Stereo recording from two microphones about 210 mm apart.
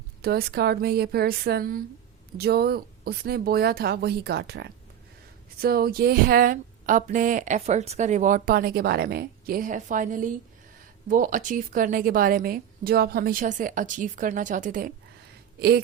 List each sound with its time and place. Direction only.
0.2 s a woman's voice: 50° right (ahead or behind)